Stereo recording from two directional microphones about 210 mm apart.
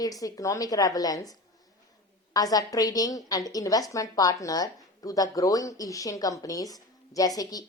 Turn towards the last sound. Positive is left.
turn(degrees=15)  # may be behind; listen again after turning